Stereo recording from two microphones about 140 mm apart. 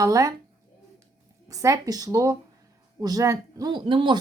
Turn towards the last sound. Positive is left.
turn(degrees=-35)  # may be behind; listen again after turning